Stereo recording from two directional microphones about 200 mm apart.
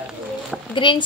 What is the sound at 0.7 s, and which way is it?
Speech, 25° left (ahead or behind).